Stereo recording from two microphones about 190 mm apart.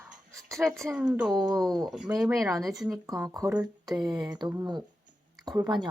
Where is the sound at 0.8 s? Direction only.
10° right (ahead or behind).